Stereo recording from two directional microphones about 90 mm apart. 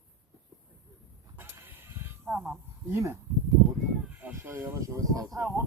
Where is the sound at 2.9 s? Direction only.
30° right (ahead or behind).